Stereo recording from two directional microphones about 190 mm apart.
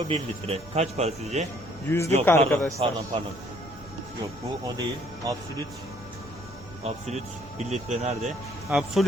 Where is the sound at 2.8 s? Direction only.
30° right (ahead or behind).